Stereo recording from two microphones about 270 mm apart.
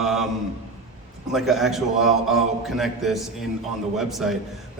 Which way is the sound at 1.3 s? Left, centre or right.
Centre.